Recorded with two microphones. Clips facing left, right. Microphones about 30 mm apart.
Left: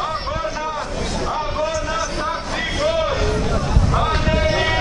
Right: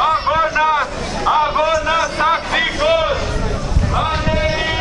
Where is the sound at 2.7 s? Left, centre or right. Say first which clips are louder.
Right 2 dB; right.